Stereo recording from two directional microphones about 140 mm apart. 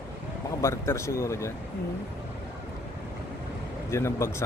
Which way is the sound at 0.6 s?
20° left (ahead or behind).